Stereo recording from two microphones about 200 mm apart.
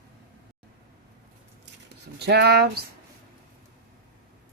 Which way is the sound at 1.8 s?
55° right (ahead or behind).